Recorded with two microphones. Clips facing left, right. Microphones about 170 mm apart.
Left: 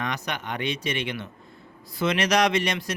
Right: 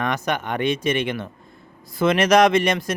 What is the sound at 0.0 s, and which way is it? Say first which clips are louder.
Speech: right 7 dB; 50° right (ahead or behind).